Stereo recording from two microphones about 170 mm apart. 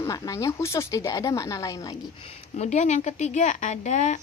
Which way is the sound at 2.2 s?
40° left (ahead or behind).